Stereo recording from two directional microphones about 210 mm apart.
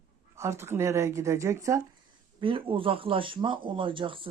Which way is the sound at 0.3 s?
15° right (ahead or behind).